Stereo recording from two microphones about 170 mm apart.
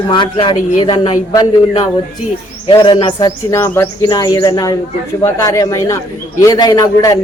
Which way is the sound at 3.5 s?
15° left (ahead or behind).